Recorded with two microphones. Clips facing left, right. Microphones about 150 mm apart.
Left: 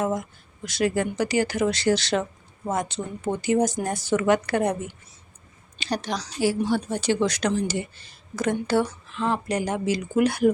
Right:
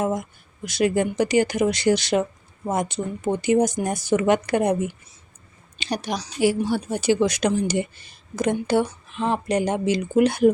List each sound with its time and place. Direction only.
0.0 s speech: 15° right (ahead or behind)
5.8 s speech: 15° right (ahead or behind)